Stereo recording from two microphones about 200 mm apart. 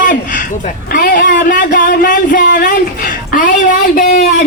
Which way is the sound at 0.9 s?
45° left (ahead or behind).